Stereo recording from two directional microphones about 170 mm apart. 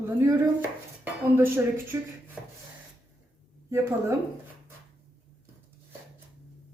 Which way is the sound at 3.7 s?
15° right (ahead or behind).